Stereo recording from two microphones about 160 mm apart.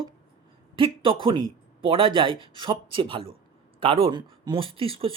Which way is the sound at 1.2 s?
30° right (ahead or behind).